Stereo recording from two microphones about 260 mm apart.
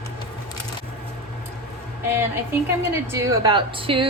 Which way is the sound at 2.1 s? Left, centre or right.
Centre.